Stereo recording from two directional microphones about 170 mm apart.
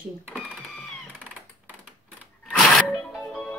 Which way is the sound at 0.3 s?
5° left (ahead or behind).